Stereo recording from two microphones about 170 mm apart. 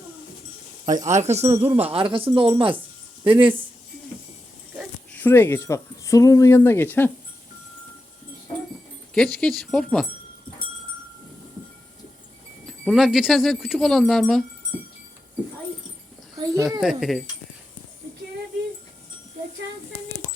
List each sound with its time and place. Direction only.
0.9 s speech: 45° right (ahead or behind)
5.1 s speech: 10° left (ahead or behind)
9.1 s speech: 5° left (ahead or behind)
12.6 s speech: centre (ahead or behind)
16.3 s a sound: 20° right (ahead or behind)
16.8 s speech: centre (ahead or behind)